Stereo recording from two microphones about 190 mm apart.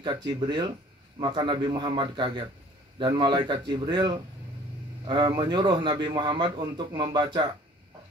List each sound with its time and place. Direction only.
0.3 s a man's voice: 25° right (ahead or behind)